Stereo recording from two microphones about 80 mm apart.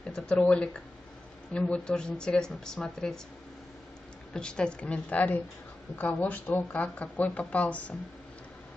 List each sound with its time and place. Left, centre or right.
0.0 s speech: centre
4.3 s speech: centre